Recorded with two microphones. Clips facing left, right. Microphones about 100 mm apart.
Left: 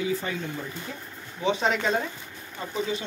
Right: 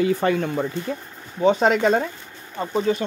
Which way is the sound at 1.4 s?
45° right (ahead or behind).